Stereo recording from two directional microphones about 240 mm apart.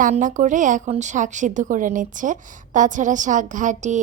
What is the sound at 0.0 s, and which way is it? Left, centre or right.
A woman's voice, right.